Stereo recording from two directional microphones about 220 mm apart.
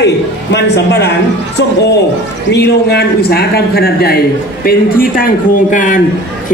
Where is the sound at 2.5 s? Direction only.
50° left (ahead or behind).